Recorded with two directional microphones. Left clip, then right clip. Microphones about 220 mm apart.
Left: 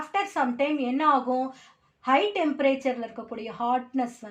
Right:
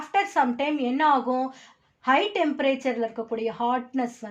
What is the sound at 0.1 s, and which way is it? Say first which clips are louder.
Speech: right 4 dB; 40° right (ahead or behind).